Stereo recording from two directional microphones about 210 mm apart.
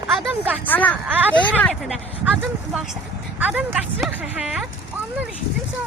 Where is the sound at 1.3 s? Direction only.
5° left (ahead or behind).